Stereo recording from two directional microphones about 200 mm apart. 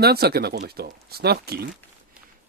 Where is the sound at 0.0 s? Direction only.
50° right (ahead or behind).